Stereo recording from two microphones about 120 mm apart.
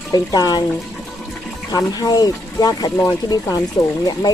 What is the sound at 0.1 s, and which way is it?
Speech, 35° left (ahead or behind).